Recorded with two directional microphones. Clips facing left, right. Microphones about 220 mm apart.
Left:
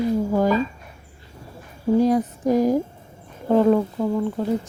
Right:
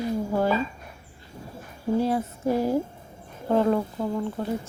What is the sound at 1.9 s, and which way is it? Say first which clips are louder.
Speech: left 6 dB; 15° left (ahead or behind).